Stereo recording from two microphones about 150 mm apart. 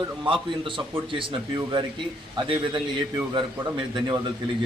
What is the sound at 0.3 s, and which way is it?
A man's voice, 35° right (ahead or behind).